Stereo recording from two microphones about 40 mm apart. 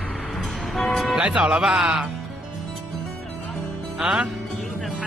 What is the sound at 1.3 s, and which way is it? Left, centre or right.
Speech, centre.